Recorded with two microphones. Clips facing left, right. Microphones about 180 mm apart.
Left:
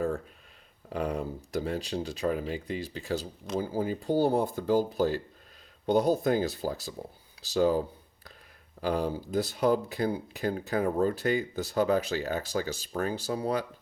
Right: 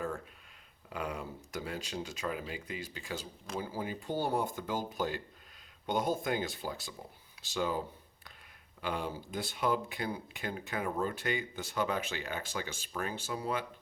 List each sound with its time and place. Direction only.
0.9 s speech: 35° left (ahead or behind)
8.8 s speech: 40° left (ahead or behind)